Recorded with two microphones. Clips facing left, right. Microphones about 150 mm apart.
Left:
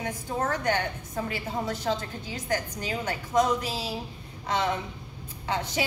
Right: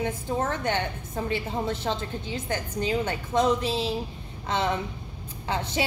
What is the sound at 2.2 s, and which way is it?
A woman's voice, 25° right (ahead or behind).